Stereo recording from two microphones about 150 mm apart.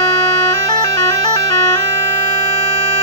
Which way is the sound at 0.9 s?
20° left (ahead or behind).